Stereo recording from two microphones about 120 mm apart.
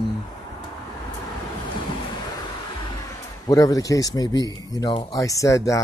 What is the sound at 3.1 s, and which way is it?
A man's voice, 30° left (ahead or behind).